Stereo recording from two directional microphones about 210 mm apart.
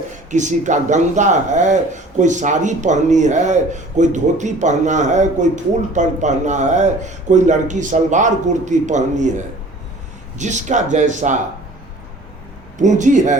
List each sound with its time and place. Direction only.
0.3 s speech: 35° right (ahead or behind)
10.3 s speech: 35° right (ahead or behind)
12.8 s speech: 35° right (ahead or behind)